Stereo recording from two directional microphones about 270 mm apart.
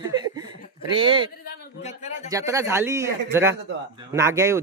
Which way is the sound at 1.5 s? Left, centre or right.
Left.